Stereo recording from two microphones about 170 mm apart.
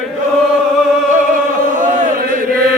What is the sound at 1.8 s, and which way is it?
Chant, 50° right (ahead or behind).